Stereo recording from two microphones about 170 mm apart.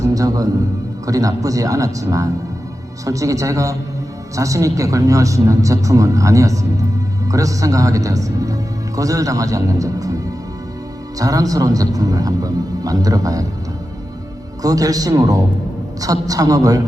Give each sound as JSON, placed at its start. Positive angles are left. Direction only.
{"t": 0.0, "sound": "music", "side_deg": -20}
{"t": 1.0, "sound": "a man's voice", "side_deg": -20}
{"t": 11.2, "sound": "a man's voice", "side_deg": -20}
{"t": 14.6, "sound": "a man's voice", "side_deg": -20}